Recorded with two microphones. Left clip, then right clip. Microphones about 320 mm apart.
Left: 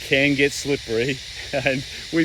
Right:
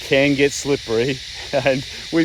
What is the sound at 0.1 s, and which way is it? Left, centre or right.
Speech, centre.